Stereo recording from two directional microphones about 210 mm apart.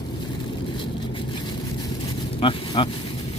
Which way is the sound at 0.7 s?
25° left (ahead or behind).